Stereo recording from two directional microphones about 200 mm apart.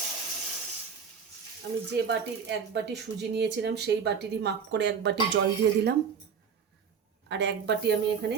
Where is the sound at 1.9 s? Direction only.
60° right (ahead or behind).